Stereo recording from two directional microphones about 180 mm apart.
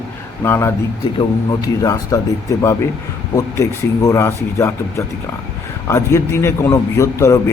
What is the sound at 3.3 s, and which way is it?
A man's voice, 15° left (ahead or behind).